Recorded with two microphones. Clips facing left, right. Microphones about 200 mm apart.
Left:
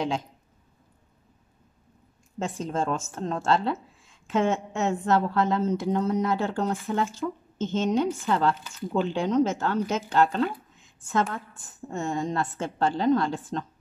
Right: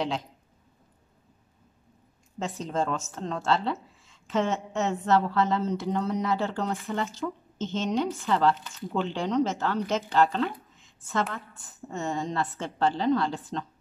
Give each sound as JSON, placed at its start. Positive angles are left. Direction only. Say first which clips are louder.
{"t": 2.3, "sound": "speech", "louder": "left 1 dB", "side_deg": 50}